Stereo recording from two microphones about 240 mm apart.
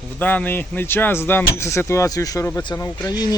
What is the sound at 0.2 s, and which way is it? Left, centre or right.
Speech, centre.